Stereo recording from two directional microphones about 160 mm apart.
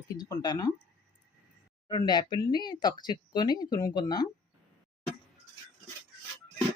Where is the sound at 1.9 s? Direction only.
25° left (ahead or behind).